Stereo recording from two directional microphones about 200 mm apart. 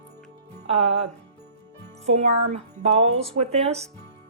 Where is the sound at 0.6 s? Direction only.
30° right (ahead or behind).